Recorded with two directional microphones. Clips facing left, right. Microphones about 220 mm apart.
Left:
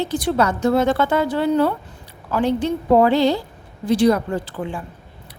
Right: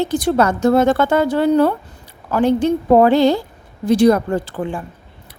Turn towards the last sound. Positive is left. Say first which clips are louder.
# right 4 dB
turn(degrees=-45)  # may be behind; listen again after turning